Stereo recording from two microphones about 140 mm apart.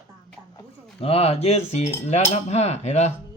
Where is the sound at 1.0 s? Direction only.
45° left (ahead or behind).